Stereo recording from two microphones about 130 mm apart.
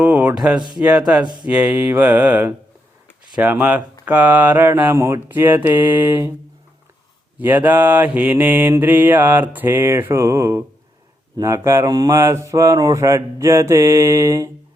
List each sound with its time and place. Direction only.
0.0 s a sound: 10° right (ahead or behind)
0.3 s mantra: 10° right (ahead or behind)
1.2 s mantra: 35° right (ahead or behind)
1.5 s mantra: 10° right (ahead or behind)
7.3 s mantra: 15° right (ahead or behind)